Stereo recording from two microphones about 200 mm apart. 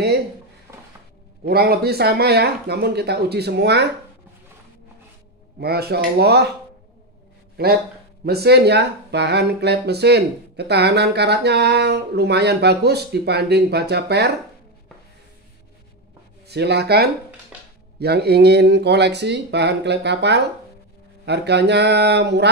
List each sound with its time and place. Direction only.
0.7 s dishes: 15° right (ahead or behind)
1.4 s speech: 50° right (ahead or behind)
5.6 s speech: 50° right (ahead or behind)
7.5 s speech: 50° right (ahead or behind)
16.4 s speech: 55° right (ahead or behind)